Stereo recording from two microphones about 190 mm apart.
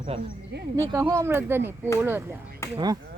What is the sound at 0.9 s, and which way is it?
Speech, 15° right (ahead or behind).